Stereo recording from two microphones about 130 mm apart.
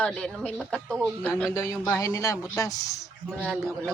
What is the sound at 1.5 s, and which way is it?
A man's voice, 25° left (ahead or behind).